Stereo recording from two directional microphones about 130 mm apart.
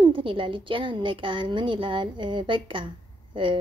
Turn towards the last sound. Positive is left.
turn(degrees=-40)  # may be behind; listen again after turning